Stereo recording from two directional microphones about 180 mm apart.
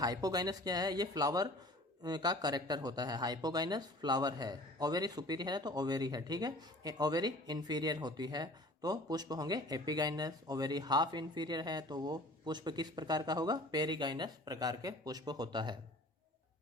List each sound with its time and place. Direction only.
0.0 s speech: 20° right (ahead or behind)